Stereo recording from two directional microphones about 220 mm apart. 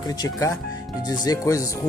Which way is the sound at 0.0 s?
20° left (ahead or behind).